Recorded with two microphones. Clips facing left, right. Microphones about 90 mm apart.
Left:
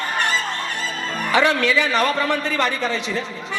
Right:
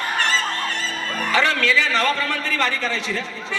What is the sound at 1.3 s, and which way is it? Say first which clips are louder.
A man's voice: left 2 dB; 20° left (ahead or behind).